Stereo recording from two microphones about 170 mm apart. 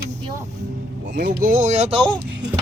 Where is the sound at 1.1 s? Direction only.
60° right (ahead or behind); by 2.0 s 40° right (ahead or behind).